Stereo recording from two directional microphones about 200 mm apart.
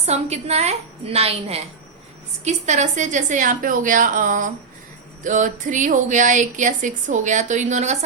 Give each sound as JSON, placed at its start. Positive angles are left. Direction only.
{"t": 0.0, "sound": "speech", "side_deg": -30}